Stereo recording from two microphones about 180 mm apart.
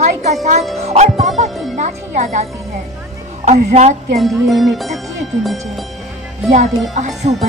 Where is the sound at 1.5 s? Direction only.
Centre (ahead or behind).